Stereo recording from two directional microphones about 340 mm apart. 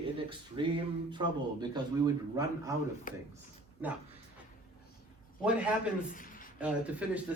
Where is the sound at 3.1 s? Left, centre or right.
Left.